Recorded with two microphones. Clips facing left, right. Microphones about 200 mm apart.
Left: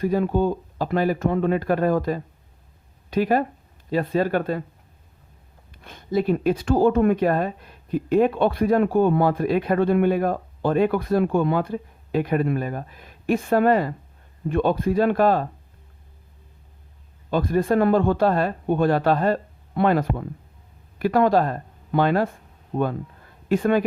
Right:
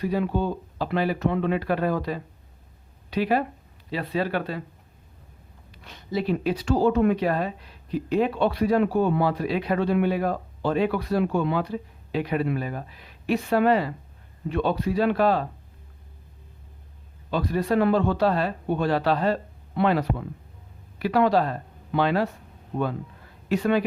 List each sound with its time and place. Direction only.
0.0 s speech: 45° left (ahead or behind)
5.7 s speech: 50° left (ahead or behind)
17.3 s speech: 50° left (ahead or behind)
23.5 s speech: 50° left (ahead or behind)